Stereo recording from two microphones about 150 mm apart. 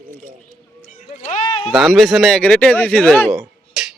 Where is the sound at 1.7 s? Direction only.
Centre (ahead or behind).